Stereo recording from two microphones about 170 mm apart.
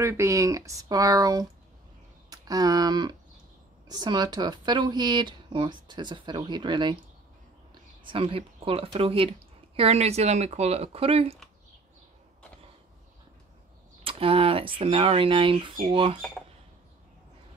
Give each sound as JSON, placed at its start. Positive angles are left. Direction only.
{"t": 0.0, "sound": "speech", "side_deg": -20}
{"t": 8.0, "sound": "speech", "side_deg": -30}
{"t": 14.0, "sound": "speech", "side_deg": -35}